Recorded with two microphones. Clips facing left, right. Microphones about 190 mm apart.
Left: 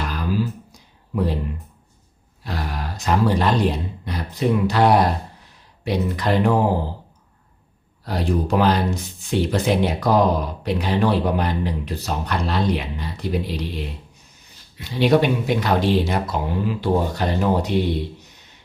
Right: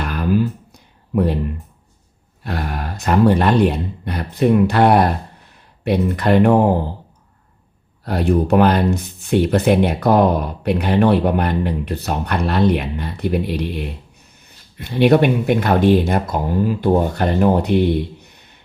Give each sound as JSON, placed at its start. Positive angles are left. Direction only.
{"t": 0.0, "sound": "a sound", "side_deg": -55}
{"t": 2.4, "sound": "speech", "side_deg": -55}
{"t": 8.0, "sound": "speech", "side_deg": -60}